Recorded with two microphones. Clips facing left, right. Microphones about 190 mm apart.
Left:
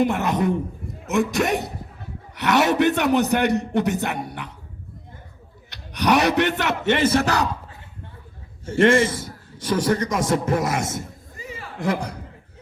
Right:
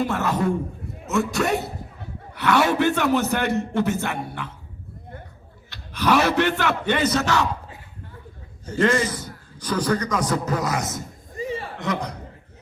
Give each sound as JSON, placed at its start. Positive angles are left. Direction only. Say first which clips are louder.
{"t": 0.0, "sound": "a man's voice", "louder": "left 2 dB", "side_deg": 15}
{"t": 5.9, "sound": "a man's voice", "louder": "left 1 dB", "side_deg": 15}
{"t": 8.6, "sound": "a man's voice", "louder": "left 4 dB", "side_deg": 25}
{"t": 11.3, "sound": "a sound", "louder": "right 9 dB", "side_deg": -30}
{"t": 11.8, "sound": "a man's voice", "louder": "left 6 dB", "side_deg": 30}